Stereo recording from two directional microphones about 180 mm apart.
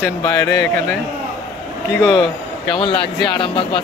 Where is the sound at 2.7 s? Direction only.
30° left (ahead or behind).